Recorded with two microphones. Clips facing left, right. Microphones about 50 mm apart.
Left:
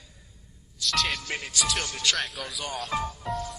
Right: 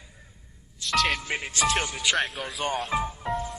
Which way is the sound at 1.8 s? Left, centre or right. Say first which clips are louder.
Right 3 dB; centre.